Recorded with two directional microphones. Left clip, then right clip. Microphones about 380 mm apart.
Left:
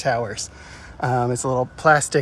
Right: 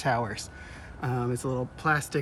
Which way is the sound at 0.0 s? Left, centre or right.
Centre.